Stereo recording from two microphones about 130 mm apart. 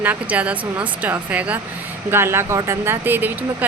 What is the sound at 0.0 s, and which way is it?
Speech, 10° right (ahead or behind).